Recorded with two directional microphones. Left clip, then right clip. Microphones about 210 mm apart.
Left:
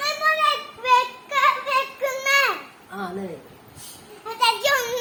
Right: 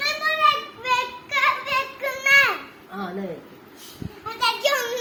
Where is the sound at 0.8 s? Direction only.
30° left (ahead or behind).